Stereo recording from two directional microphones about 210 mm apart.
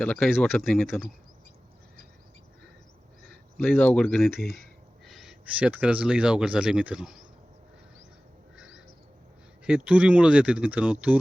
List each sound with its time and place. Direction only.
0.0 s speech: 5° left (ahead or behind)
3.6 s speech: 10° left (ahead or behind)
9.6 s speech: 5° right (ahead or behind)